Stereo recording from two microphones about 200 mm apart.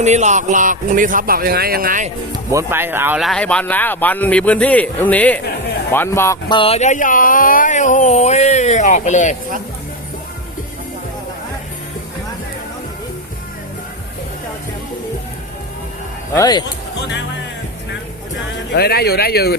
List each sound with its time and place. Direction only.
0.0 s a man's voice: 35° right (ahead or behind)
2.3 s speech: 15° right (ahead or behind); by 6.6 s 15° left (ahead or behind)
6.6 s speech: 30° left (ahead or behind)
16.3 s speech: 20° left (ahead or behind)
18.7 s speech: 55° left (ahead or behind)